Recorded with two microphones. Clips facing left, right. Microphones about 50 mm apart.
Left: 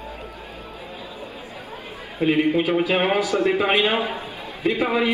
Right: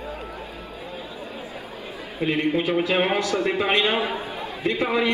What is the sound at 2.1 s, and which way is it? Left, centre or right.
A man's voice, centre.